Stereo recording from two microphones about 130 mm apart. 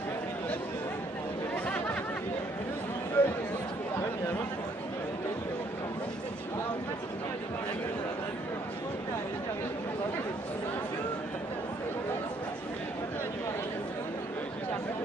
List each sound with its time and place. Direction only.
3.2 s chatter: 15° left (ahead or behind)